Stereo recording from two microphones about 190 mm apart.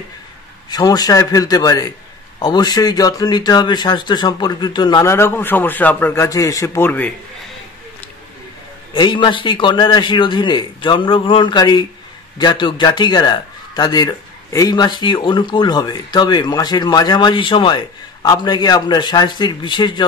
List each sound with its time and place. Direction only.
0.7 s a man's voice: 20° left (ahead or behind)
8.9 s a man's voice: 25° left (ahead or behind)